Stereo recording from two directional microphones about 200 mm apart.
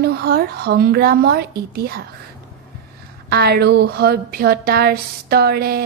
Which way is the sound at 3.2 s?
55° right (ahead or behind).